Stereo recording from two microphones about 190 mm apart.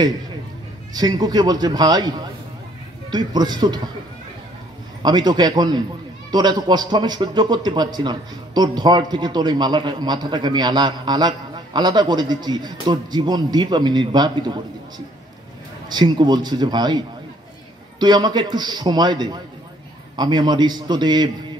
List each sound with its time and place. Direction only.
0.9 s a man's voice: 20° right (ahead or behind)
5.0 s a man's voice: 20° right (ahead or behind)
15.9 s a man's voice: 20° right (ahead or behind)